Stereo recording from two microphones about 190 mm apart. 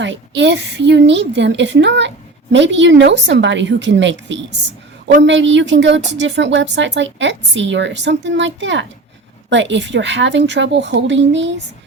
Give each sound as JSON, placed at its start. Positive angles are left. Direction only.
{"t": 0.0, "sound": "a woman's voice", "side_deg": -70}